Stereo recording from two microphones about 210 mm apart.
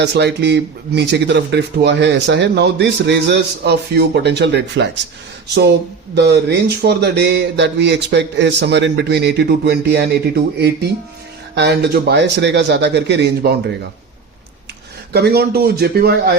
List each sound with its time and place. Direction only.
0.0 s speech: 55° right (ahead or behind)
6.1 s a man's voice: 50° right (ahead or behind)
11.5 s speech: 55° right (ahead or behind)
15.1 s a man's voice: 50° right (ahead or behind)